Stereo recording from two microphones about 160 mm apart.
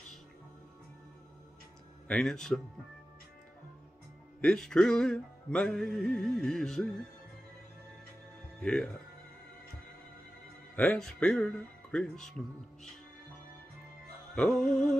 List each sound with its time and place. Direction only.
2.0 s music: 5° left (ahead or behind)
4.4 s music: 5° left (ahead or behind)
8.5 s music: 5° left (ahead or behind)
10.8 s music: 5° left (ahead or behind)
14.3 s music: 5° left (ahead or behind)